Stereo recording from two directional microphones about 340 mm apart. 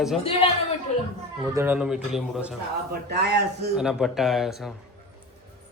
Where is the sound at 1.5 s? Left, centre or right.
Centre.